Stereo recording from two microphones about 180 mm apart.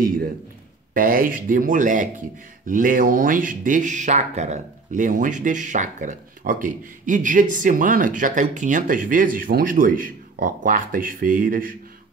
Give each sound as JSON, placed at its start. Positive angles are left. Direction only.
{"t": 0.9, "sound": "speech", "side_deg": -50}